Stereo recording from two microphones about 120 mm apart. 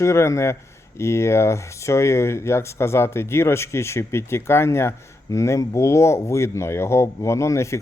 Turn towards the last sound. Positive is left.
turn(degrees=25)  # may be behind; listen again after turning